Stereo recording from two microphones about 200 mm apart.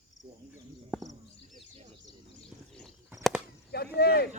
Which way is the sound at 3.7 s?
55° left (ahead or behind).